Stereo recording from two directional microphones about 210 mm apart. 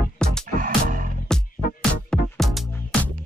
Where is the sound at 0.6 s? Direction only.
40° right (ahead or behind).